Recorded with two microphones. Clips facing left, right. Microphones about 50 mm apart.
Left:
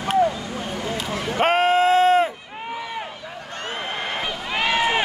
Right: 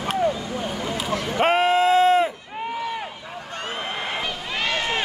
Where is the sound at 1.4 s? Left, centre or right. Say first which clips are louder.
Left 1 dB; left.